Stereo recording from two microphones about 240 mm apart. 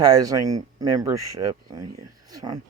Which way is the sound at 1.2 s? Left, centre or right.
Right.